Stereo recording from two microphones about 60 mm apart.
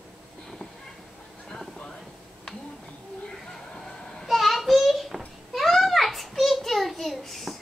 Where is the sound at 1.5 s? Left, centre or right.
Centre.